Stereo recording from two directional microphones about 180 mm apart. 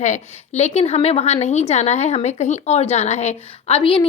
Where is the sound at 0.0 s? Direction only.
40° left (ahead or behind).